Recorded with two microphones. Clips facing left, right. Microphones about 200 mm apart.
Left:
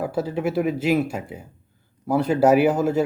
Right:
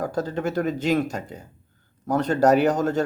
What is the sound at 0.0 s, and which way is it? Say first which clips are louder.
Speech: left 2 dB; 5° left (ahead or behind).